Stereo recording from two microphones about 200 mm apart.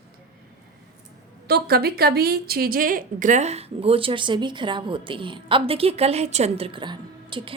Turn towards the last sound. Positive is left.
turn(degrees=-25)  # may be behind; listen again after turning